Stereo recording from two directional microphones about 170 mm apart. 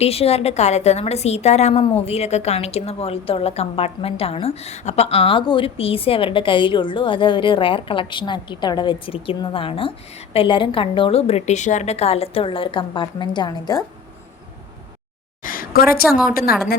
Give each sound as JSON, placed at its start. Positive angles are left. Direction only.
{"t": 0.0, "sound": "a woman's voice", "side_deg": 35}
{"t": 15.4, "sound": "a sound", "side_deg": 60}
{"t": 16.0, "sound": "a woman's voice", "side_deg": -5}
{"t": 16.3, "sound": "a woman's voice", "side_deg": 60}